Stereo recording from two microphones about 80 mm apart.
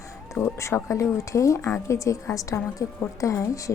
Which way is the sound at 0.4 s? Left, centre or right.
Left.